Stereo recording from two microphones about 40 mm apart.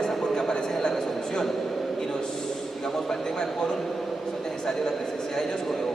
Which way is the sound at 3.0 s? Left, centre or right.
Centre.